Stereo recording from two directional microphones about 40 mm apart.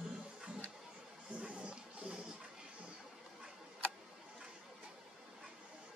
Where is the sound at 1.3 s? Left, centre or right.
Right.